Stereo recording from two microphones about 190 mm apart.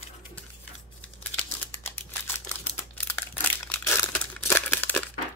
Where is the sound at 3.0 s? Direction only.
10° left (ahead or behind).